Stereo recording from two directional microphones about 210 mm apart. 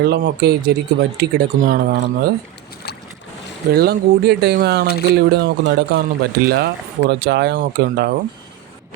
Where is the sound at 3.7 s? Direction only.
50° right (ahead or behind).